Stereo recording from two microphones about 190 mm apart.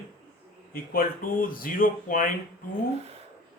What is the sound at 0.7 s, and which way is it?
Speech, 50° left (ahead or behind).